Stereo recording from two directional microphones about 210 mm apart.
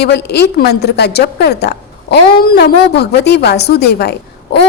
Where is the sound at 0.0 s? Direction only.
50° left (ahead or behind).